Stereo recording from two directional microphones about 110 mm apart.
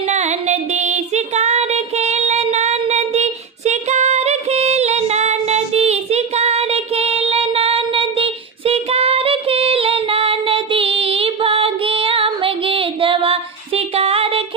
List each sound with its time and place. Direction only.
0.1 s female singing: 90° right; by 14.4 s 60° right (ahead or behind)